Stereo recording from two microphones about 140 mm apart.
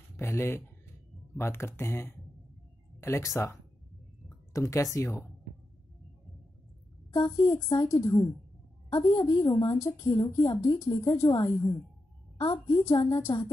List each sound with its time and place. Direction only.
0.2 s a woman's voice: 20° left (ahead or behind)
4.6 s a woman's voice: 20° left (ahead or behind)
7.1 s a woman's voice: 25° left (ahead or behind)